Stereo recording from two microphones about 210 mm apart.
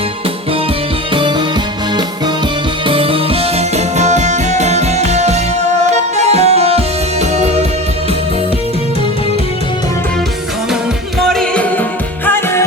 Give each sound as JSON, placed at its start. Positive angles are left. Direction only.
{"t": 2.8, "sound": "music", "side_deg": -25}
{"t": 11.3, "sound": "music", "side_deg": 5}